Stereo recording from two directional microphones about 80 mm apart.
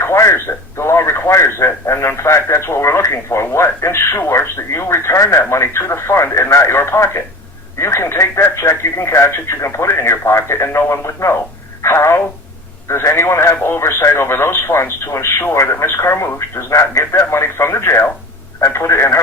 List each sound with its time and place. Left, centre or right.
0.0 s speech: left
11.8 s telephone: left
12.9 s speech: left